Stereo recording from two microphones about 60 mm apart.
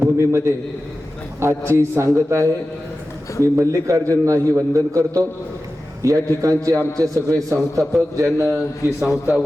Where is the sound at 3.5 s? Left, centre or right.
Right.